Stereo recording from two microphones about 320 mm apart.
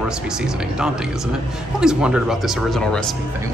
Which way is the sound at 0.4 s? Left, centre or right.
Centre.